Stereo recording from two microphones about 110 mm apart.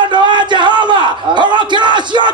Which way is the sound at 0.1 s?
45° right (ahead or behind).